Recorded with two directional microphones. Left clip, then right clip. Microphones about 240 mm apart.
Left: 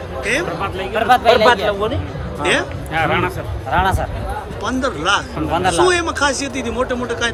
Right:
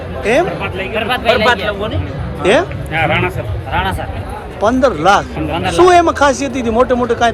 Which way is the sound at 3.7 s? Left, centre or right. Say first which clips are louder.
Left 1 dB; left.